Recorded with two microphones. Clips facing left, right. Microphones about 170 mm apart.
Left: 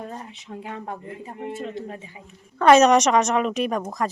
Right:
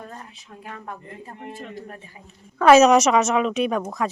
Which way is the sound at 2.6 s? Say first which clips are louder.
Right 1 dB; 5° right (ahead or behind).